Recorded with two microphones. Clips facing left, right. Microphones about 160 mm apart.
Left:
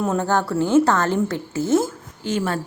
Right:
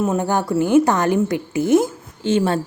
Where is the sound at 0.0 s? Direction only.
10° right (ahead or behind).